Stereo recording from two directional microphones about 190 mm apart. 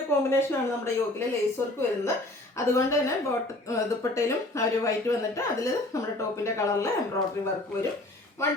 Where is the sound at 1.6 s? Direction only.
15° left (ahead or behind).